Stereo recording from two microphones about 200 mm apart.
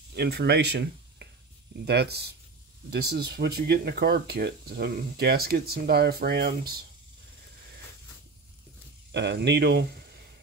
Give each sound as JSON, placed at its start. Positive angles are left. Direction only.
{"t": 0.1, "sound": "speech", "side_deg": -55}
{"t": 9.1, "sound": "speech", "side_deg": -55}